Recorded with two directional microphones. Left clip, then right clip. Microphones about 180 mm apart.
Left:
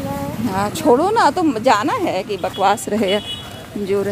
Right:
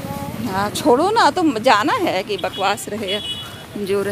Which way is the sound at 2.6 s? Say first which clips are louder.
Left 8 dB; 20° left (ahead or behind).